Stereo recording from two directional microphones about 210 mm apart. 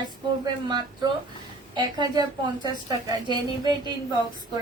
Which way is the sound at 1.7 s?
20° right (ahead or behind).